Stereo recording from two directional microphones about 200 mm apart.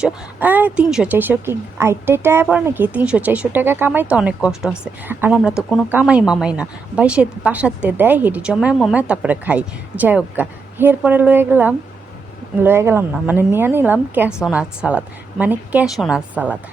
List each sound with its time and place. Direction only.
0.0 s speech: 10° right (ahead or behind)